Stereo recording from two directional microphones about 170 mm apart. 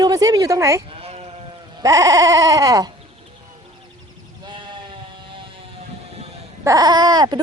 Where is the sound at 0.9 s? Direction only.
35° right (ahead or behind).